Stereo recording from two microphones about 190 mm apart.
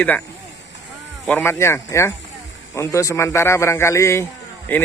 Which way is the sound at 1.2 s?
10° left (ahead or behind).